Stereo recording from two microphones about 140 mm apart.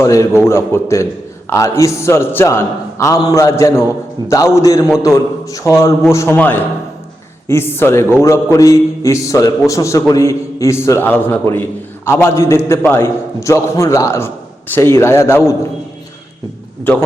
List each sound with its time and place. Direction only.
0.0 s a man's voice: 20° left (ahead or behind)